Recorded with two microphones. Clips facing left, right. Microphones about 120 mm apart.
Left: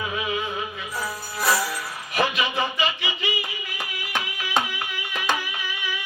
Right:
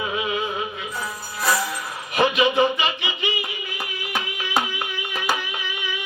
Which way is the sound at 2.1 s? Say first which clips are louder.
Right 6 dB; 20° right (ahead or behind).